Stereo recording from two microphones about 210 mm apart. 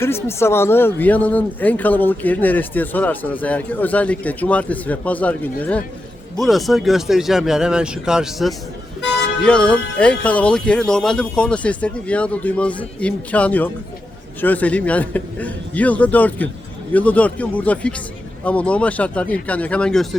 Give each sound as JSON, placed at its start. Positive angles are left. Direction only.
{"t": 0.0, "sound": "speech", "side_deg": 10}
{"t": 9.0, "sound": "vehicle", "side_deg": 60}
{"t": 9.4, "sound": "speech", "side_deg": 5}